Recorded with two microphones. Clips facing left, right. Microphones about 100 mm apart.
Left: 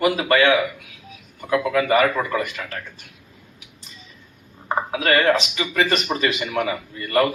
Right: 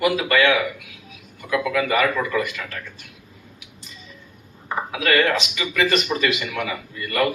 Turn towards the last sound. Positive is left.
turn(degrees=35)  # may be behind; listen again after turning